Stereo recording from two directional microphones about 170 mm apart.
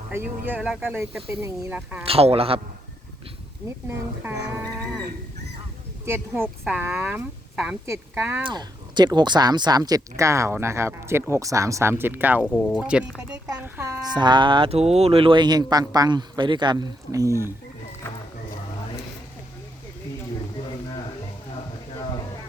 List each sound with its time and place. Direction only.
0.1 s speech: 10° right (ahead or behind)
2.0 s a man's voice: 35° right (ahead or behind)
3.8 s speech: 10° right (ahead or behind)
4.4 s dog: 20° right (ahead or behind)
6.1 s speech: 15° right (ahead or behind)
8.4 s speech: 25° right (ahead or behind)